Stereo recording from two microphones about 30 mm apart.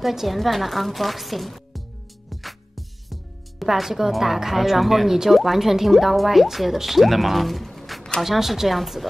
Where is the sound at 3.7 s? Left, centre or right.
Centre.